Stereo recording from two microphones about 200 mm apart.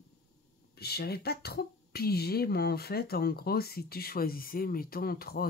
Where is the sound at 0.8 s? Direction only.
50° left (ahead or behind).